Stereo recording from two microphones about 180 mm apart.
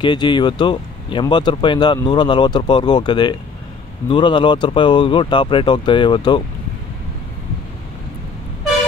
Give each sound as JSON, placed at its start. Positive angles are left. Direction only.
{"t": 0.0, "sound": "speech", "side_deg": 25}